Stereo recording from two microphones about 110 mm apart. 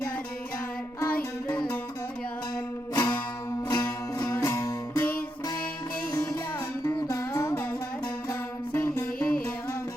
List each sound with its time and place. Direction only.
1.1 s music: 15° left (ahead or behind)
2.9 s music: 35° left (ahead or behind)
6.8 s music: 30° left (ahead or behind)
9.1 s music: 10° left (ahead or behind)